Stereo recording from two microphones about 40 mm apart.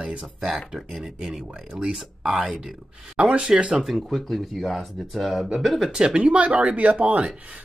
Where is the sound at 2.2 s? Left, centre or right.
Centre.